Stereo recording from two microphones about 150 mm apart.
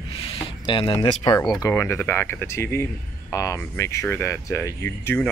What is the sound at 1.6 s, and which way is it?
Speech, 20° left (ahead or behind).